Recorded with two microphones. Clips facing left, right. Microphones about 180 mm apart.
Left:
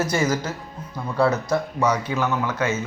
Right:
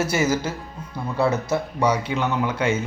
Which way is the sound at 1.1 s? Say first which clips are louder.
Left 1 dB; 25° right (ahead or behind).